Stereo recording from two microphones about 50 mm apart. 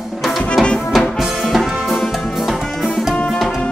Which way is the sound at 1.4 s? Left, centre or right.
Centre.